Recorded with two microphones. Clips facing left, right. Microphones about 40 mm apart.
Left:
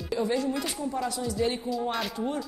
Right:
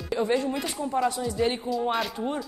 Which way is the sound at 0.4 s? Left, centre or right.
Right.